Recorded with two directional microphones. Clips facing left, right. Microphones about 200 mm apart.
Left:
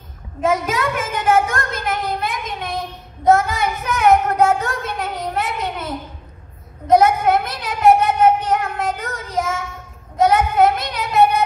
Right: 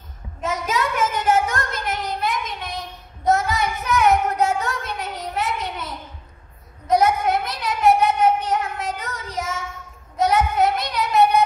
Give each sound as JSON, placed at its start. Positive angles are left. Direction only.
{"t": 0.4, "sound": "child singing", "side_deg": 55}
{"t": 6.9, "sound": "a sound", "side_deg": 50}
{"t": 10.1, "sound": "child singing", "side_deg": 50}